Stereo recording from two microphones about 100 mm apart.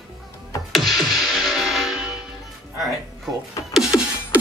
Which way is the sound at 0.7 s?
Centre (ahead or behind).